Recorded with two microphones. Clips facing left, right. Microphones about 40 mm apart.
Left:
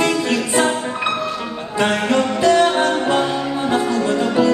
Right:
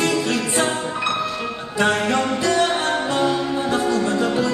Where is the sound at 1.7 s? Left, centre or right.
Left.